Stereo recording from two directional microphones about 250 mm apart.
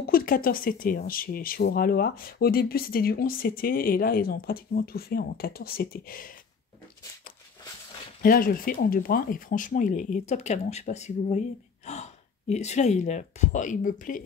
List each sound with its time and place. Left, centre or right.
0.0 s speech: left
8.2 s speech: left